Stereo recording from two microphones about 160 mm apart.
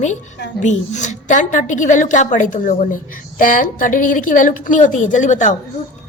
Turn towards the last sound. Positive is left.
turn(degrees=50)  # may be behind; listen again after turning